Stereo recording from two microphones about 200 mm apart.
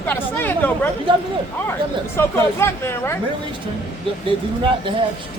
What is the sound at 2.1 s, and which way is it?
Speech, 15° left (ahead or behind).